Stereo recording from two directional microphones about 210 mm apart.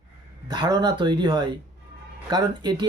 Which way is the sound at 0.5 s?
20° right (ahead or behind).